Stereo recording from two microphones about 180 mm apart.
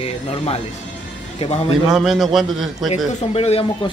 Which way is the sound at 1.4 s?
35° left (ahead or behind).